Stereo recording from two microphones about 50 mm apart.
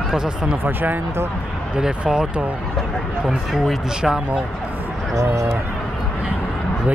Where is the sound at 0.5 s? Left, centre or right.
Right.